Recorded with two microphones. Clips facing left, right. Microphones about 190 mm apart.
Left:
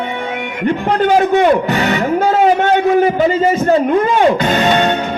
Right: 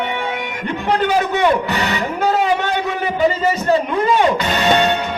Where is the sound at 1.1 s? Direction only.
45° left (ahead or behind).